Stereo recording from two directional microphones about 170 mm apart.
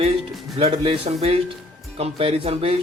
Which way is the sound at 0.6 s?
30° right (ahead or behind).